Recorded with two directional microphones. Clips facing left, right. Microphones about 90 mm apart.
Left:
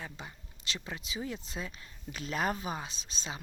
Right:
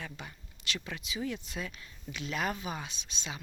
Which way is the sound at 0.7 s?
30° left (ahead or behind).